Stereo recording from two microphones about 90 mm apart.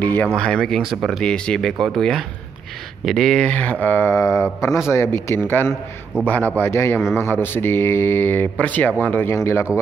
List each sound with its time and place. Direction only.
0.0 s a sound: 20° left (ahead or behind)
0.4 s speech: 10° left (ahead or behind)
1.2 s speech: 10° left (ahead or behind)
3.4 s speech: 15° left (ahead or behind)